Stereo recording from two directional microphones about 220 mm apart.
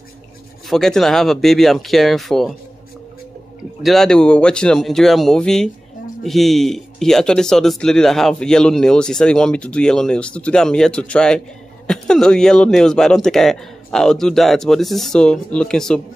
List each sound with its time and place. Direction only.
0.7 s speech: centre (ahead or behind)
3.8 s speech: centre (ahead or behind)